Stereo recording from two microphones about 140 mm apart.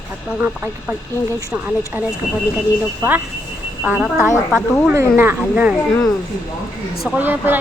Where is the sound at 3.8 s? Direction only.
10° right (ahead or behind).